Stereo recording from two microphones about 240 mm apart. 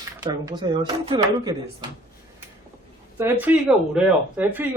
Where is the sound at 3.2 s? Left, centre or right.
Centre.